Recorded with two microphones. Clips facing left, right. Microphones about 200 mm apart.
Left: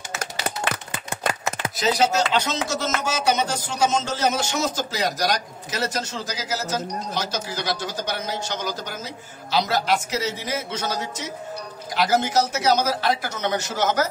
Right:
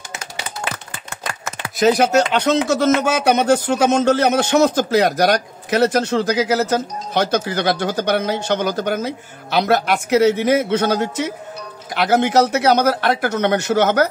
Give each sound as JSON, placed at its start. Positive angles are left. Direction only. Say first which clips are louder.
{"t": 1.8, "sound": "speech", "louder": "right 7 dB", "side_deg": -55}